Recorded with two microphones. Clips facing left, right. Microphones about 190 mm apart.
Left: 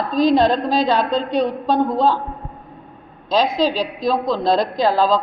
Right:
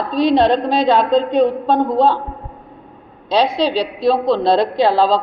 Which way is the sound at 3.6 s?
45° left (ahead or behind).